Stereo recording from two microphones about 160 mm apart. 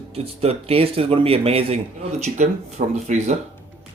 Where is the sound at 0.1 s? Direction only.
40° right (ahead or behind).